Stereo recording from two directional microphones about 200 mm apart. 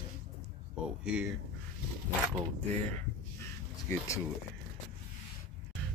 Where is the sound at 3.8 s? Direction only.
15° left (ahead or behind).